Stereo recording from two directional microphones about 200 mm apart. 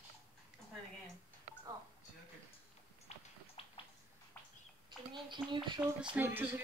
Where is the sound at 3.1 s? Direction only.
35° left (ahead or behind).